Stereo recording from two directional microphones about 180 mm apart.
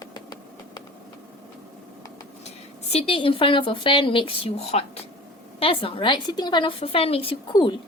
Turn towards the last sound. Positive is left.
turn(degrees=25)  # may be behind; listen again after turning